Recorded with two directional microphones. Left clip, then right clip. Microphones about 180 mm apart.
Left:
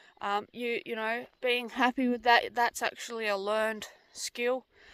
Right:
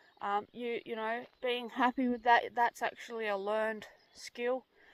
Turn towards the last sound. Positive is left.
turn(degrees=20)  # may be behind; listen again after turning